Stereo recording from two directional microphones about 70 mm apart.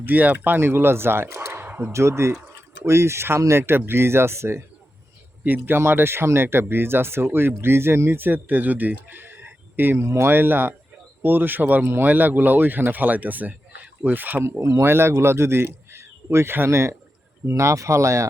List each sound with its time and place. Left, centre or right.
0.0 s speech: right
1.6 s a sound: right
1.9 s speech: right
5.4 s speech: right
10.0 s speech: right
10.3 s speech: right
14.6 s a man's voice: right